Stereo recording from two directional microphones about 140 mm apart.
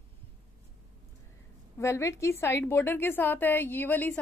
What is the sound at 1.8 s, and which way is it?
A woman's voice, 20° left (ahead or behind).